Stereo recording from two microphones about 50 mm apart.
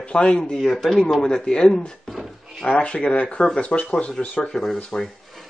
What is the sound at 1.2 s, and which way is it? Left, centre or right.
Speech, centre.